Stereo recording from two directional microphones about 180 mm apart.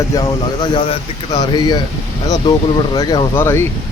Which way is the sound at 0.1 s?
20° left (ahead or behind).